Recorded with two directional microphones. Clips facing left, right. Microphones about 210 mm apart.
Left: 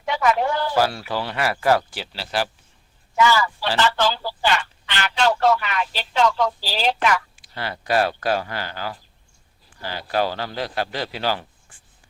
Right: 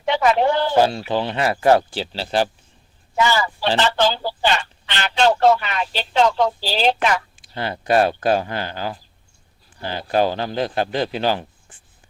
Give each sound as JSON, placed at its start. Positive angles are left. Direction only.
{"t": 0.0, "sound": "speech", "side_deg": -25}